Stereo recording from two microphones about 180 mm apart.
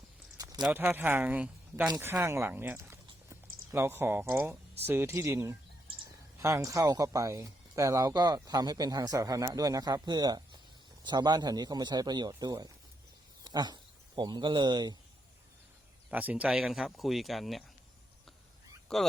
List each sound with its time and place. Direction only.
0.3 s a sound: 20° right (ahead or behind)
0.6 s speech: 10° right (ahead or behind)
13.4 s a sound: 20° right (ahead or behind)
14.2 s speech: 25° right (ahead or behind)
16.0 s speech: 5° right (ahead or behind)
18.9 s speech: 5° left (ahead or behind)